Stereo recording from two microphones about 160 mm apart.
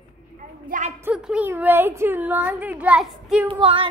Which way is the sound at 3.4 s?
30° right (ahead or behind).